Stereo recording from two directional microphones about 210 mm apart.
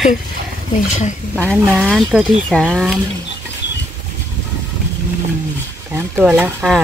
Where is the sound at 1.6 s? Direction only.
Centre (ahead or behind).